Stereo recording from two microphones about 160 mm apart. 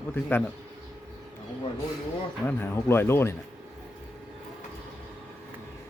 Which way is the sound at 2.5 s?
15° left (ahead or behind).